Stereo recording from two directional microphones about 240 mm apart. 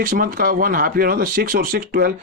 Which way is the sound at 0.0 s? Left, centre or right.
Right.